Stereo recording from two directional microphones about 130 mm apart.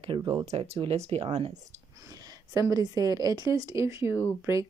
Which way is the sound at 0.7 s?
55° right (ahead or behind).